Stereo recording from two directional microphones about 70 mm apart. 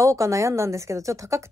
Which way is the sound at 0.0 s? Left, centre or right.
Right.